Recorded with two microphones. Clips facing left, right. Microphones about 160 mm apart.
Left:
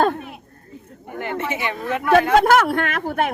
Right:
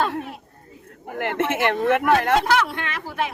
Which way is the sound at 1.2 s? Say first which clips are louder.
Right 3 dB; 85° right.